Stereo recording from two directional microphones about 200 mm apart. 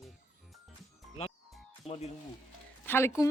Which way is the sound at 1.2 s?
30° left (ahead or behind).